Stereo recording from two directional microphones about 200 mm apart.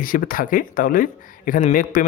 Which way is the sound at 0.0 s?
45° left (ahead or behind).